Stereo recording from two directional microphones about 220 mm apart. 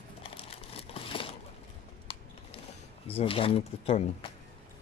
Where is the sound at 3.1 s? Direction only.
25° left (ahead or behind).